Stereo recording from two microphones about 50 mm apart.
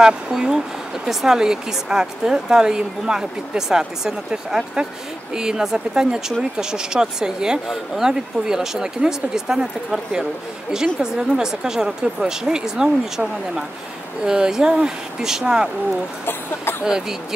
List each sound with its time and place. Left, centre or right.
0.0 s speech: centre
16.3 s speech: left
16.8 s speech: centre